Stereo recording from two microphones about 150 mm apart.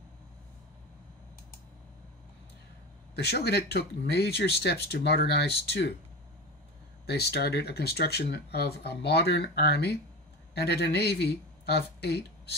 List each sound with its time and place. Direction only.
3.2 s speech: 90° left
7.1 s speech: 90° left